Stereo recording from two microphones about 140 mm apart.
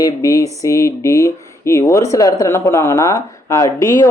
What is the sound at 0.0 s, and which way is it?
Speech, 25° left (ahead or behind).